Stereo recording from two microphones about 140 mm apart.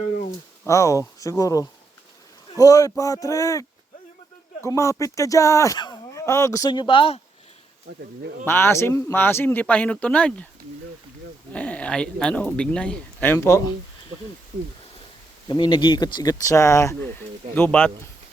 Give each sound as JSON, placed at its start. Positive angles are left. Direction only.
{"t": 0.6, "sound": "speech", "side_deg": 20}
{"t": 8.4, "sound": "speech", "side_deg": 15}
{"t": 11.5, "sound": "speech", "side_deg": 10}
{"t": 15.4, "sound": "speech", "side_deg": 35}